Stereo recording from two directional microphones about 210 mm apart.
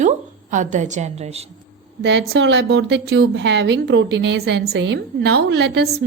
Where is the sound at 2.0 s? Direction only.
55° right (ahead or behind).